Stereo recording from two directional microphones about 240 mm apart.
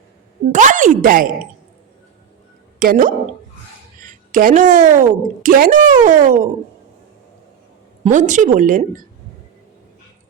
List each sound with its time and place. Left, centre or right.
0.5 s a child's voice: right
2.7 s a child's voice: right
8.0 s a child's voice: right